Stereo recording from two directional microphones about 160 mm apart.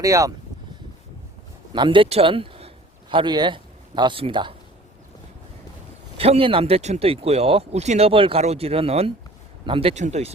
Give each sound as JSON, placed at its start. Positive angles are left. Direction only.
{"t": 0.0, "sound": "speech", "side_deg": -20}
{"t": 1.7, "sound": "a man's voice", "side_deg": -30}
{"t": 6.1, "sound": "speech", "side_deg": -35}
{"t": 9.9, "sound": "speech", "side_deg": -45}